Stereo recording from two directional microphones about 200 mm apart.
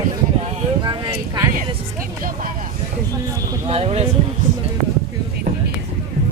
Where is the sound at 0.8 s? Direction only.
20° right (ahead or behind).